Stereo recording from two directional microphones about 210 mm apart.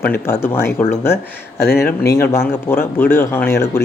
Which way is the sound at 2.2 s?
10° left (ahead or behind).